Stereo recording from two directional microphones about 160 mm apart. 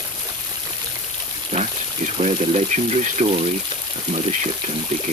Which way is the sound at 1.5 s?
50° right (ahead or behind).